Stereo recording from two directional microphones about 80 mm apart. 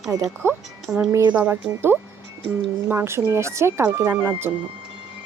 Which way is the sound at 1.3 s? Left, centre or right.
Right.